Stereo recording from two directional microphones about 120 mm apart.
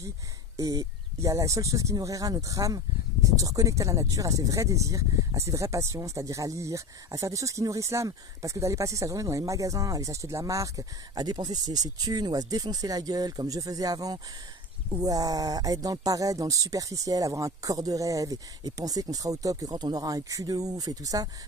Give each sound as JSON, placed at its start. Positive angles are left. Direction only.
{"t": 0.6, "sound": "speech", "side_deg": -30}